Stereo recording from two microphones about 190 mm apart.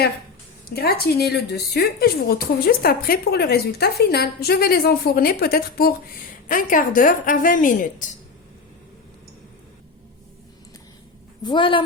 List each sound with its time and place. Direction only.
0.7 s a woman's voice: 55° left (ahead or behind)
11.4 s a woman's voice: 25° left (ahead or behind)